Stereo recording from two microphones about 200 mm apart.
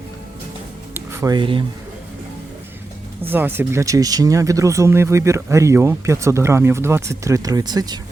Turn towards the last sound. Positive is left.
turn(degrees=-20)  # may be behind; listen again after turning